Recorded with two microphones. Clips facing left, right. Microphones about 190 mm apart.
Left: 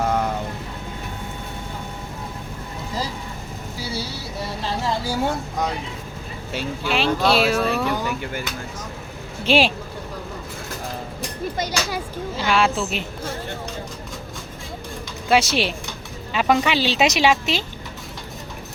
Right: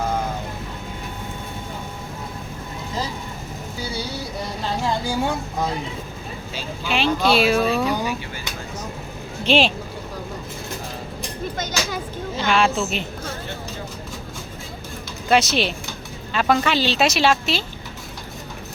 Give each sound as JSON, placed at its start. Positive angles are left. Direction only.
{"t": 4.8, "sound": "speech", "side_deg": 0}
{"t": 6.8, "sound": "speech", "side_deg": 0}
{"t": 7.8, "sound": "speech", "side_deg": -20}
{"t": 9.4, "sound": "speech", "side_deg": 10}
{"t": 11.5, "sound": "speech", "side_deg": 10}
{"t": 15.3, "sound": "speech", "side_deg": 10}